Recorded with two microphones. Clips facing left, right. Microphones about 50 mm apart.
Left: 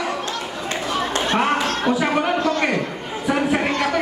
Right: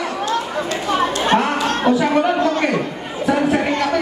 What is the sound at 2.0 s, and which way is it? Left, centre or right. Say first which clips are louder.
Speech: right 4 dB; centre.